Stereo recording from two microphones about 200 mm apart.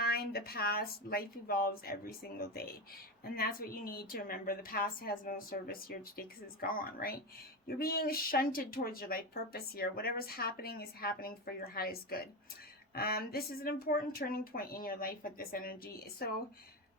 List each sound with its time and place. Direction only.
0.0 s a woman's voice: 50° left (ahead or behind)
3.3 s a woman's voice: 45° left (ahead or behind)